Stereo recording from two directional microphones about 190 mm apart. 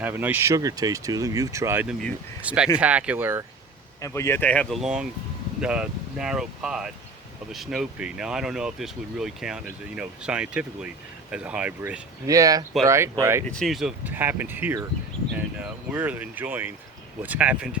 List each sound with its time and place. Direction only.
0.0 s speech: 10° right (ahead or behind)
4.0 s speech: 15° left (ahead or behind); by 13.4 s 15° right (ahead or behind)
13.5 s speech: centre (ahead or behind)